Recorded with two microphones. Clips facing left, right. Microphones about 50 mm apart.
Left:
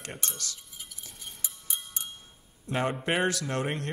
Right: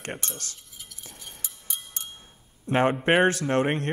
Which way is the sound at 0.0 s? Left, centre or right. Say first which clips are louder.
Right 4 dB; right.